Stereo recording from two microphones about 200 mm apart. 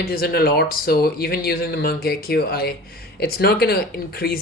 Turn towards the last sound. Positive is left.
turn(degrees=50)  # may be behind; listen again after turning